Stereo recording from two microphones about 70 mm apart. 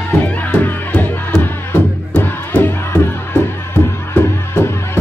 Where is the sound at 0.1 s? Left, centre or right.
Left.